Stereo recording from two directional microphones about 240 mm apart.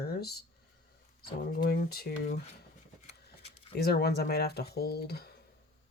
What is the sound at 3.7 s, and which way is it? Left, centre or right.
Speech, left.